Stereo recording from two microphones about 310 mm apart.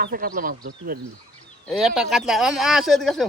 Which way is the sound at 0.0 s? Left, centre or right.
Right.